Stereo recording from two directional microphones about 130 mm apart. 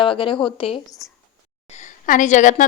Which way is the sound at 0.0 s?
40° left (ahead or behind).